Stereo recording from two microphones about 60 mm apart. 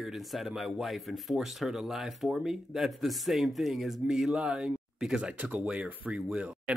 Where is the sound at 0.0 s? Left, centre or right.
Centre.